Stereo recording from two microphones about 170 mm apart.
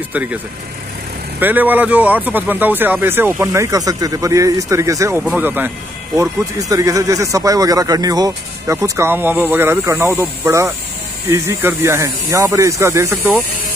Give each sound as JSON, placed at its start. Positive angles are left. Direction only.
{"t": 0.1, "sound": "speech", "side_deg": -10}
{"t": 1.4, "sound": "speech", "side_deg": -10}
{"t": 6.7, "sound": "speech", "side_deg": -20}